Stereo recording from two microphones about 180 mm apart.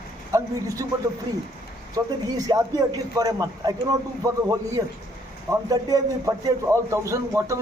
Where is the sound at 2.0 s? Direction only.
20° right (ahead or behind).